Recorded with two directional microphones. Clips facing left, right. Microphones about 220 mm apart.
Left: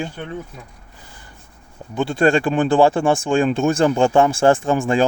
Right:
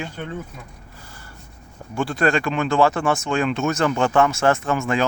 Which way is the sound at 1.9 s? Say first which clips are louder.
Left 4 dB; 25° left (ahead or behind).